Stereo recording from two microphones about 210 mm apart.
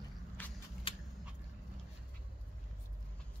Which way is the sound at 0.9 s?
25° left (ahead or behind).